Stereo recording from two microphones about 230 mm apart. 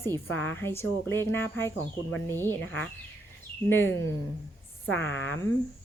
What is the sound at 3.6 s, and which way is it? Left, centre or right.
Speech, centre.